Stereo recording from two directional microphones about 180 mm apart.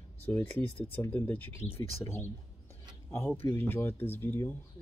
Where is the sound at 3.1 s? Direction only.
10° left (ahead or behind).